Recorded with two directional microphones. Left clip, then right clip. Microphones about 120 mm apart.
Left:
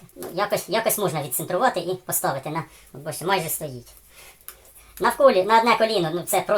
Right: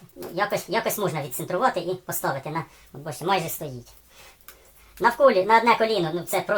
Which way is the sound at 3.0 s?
30° right (ahead or behind).